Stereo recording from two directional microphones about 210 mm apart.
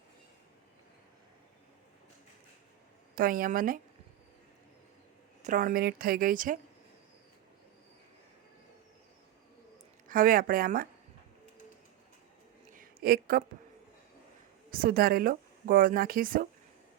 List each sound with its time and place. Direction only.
3.2 s speech: 40° right (ahead or behind)
5.4 s speech: 40° right (ahead or behind)
10.1 s speech: 40° right (ahead or behind)
12.7 s a sound: 45° right (ahead or behind)
14.7 s speech: 45° right (ahead or behind)